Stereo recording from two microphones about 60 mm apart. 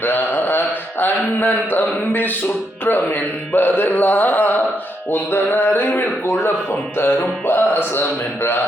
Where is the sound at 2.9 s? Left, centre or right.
Left.